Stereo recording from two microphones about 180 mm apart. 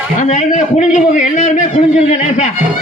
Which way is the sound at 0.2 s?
40° left (ahead or behind).